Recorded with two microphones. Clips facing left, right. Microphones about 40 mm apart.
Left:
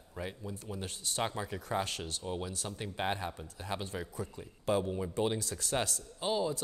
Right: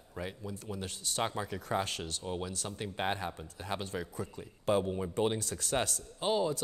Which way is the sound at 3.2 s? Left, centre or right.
Right.